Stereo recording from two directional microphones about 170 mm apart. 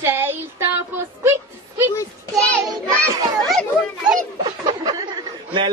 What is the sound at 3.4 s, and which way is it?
Speech, centre (ahead or behind).